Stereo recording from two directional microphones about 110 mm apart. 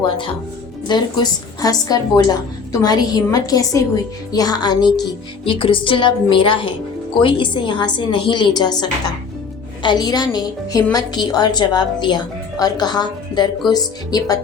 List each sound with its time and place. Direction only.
0.9 s a woman's voice: 40° left (ahead or behind)
5.5 s a woman's voice: 50° left (ahead or behind); by 14.3 s 35° left (ahead or behind)